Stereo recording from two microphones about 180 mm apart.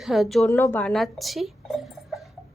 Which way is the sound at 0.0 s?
Centre (ahead or behind).